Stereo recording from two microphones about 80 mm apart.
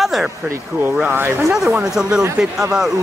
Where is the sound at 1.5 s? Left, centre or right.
Centre.